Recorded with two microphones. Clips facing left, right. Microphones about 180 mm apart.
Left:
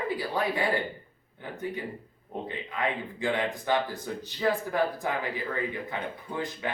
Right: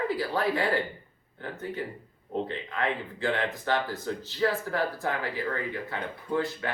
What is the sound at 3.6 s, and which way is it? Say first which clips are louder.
Speech: even; 15° left (ahead or behind).